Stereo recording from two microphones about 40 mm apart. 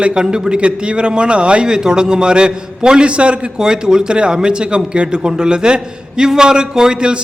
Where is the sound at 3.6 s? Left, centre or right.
Centre.